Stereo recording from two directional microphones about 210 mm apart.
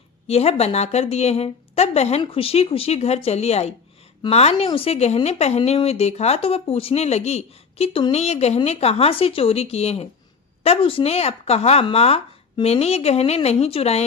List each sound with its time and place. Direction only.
0.3 s speech: 30° left (ahead or behind)